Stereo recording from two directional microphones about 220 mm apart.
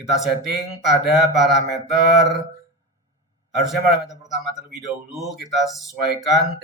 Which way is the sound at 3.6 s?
Centre (ahead or behind).